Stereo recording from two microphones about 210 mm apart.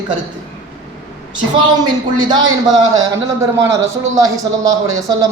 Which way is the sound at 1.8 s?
20° right (ahead or behind).